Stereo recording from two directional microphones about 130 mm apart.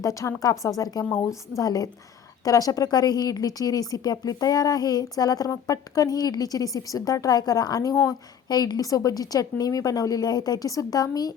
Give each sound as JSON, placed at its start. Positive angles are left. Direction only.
{"t": 0.0, "sound": "speech", "side_deg": 25}